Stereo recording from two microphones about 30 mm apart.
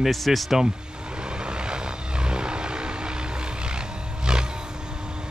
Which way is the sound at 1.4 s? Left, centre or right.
Right.